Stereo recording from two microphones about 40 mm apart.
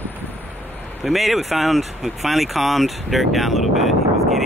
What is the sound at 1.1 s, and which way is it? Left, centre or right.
Speech, centre.